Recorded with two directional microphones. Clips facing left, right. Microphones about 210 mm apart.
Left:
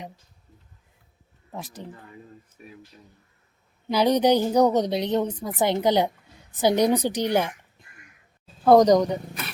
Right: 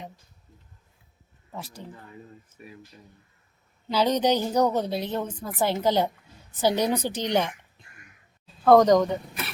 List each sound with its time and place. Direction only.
1.5 s a woman's voice: 15° left (ahead or behind)
3.8 s a woman's voice: 15° left (ahead or behind)
8.6 s a woman's voice: 10° left (ahead or behind)